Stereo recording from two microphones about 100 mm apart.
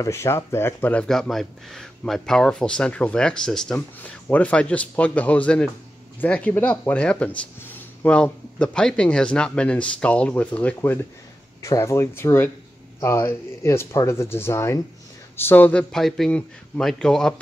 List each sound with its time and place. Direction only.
0.0 s speech: 30° left (ahead or behind)
1.0 s speech: 5° left (ahead or behind)
15.9 s speech: 5° left (ahead or behind)
16.3 s speech: 15° left (ahead or behind)